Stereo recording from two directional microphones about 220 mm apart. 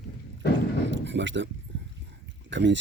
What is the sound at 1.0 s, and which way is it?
Speech, 55° right (ahead or behind).